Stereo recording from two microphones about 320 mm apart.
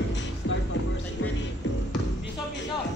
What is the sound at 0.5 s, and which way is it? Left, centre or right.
Music, left.